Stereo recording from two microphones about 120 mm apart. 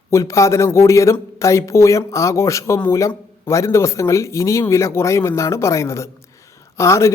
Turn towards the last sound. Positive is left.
turn(degrees=25)  # may be behind; listen again after turning